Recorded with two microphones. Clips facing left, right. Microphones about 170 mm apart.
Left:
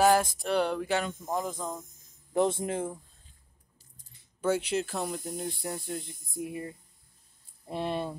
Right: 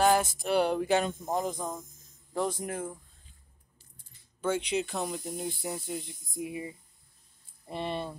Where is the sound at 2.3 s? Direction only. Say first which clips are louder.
Left 5 dB; 25° left (ahead or behind).